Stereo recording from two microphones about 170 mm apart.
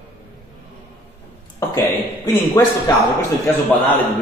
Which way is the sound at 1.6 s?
15° left (ahead or behind).